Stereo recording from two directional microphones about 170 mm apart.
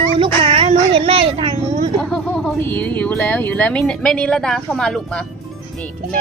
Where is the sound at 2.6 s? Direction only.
10° left (ahead or behind).